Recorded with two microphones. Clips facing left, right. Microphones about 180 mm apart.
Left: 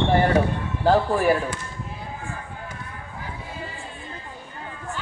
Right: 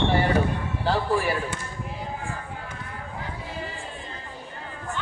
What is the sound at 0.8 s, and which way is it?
Speech, 45° left (ahead or behind).